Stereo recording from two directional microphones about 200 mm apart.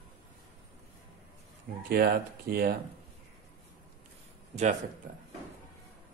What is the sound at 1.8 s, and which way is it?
Speech, 50° right (ahead or behind).